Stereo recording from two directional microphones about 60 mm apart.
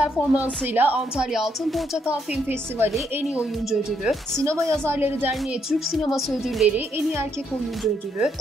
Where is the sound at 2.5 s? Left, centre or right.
Right.